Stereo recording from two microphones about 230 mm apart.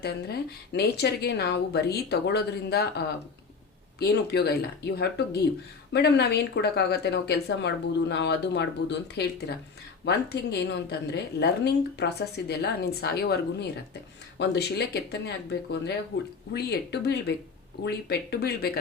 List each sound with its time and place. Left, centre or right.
0.0 s a woman's voice: left
4.0 s a woman's voice: left
16.1 s a woman's voice: left